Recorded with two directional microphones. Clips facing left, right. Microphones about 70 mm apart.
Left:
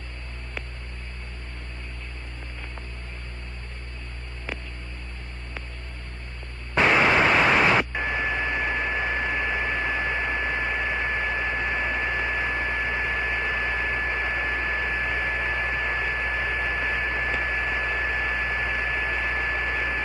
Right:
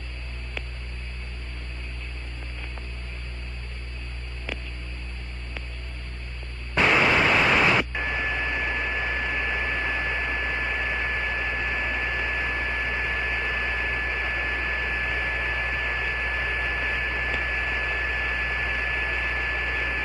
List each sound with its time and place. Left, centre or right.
6.7 s radio: centre